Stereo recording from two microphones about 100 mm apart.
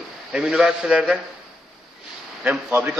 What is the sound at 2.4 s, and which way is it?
Speech, 10° right (ahead or behind).